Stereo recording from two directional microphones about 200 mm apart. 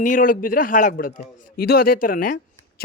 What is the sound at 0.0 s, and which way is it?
A man's voice, 45° left (ahead or behind).